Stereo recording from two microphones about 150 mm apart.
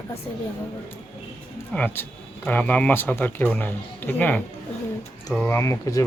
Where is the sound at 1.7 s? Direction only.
10° left (ahead or behind).